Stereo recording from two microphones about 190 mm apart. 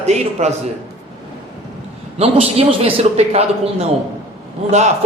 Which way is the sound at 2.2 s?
35° right (ahead or behind).